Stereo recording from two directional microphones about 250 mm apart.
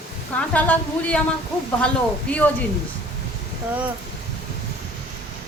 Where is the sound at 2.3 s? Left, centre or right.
Centre.